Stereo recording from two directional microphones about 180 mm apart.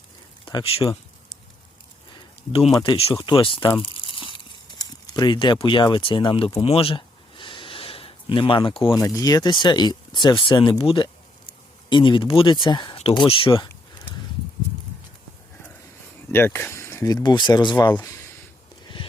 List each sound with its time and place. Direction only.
0.4 s speech: 30° left (ahead or behind)
2.8 s speech: 25° left (ahead or behind)
6.6 s a sound: 30° left (ahead or behind)
9.0 s speech: 20° left (ahead or behind)
16.3 s speech: 10° left (ahead or behind)